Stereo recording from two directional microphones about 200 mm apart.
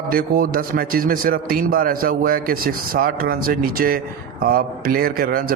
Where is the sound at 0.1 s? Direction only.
45° right (ahead or behind).